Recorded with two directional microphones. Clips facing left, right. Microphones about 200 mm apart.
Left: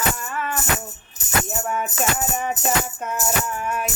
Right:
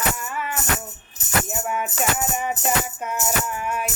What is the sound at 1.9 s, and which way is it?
Music, 10° right (ahead or behind).